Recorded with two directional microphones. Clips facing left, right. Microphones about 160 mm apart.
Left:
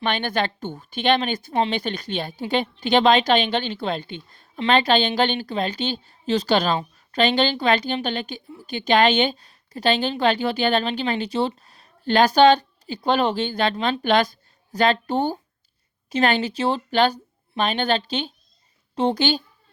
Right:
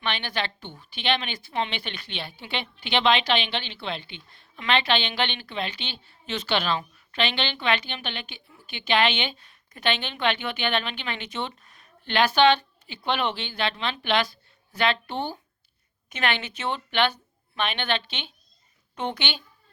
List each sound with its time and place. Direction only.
0.0 s a woman's voice: 45° left (ahead or behind)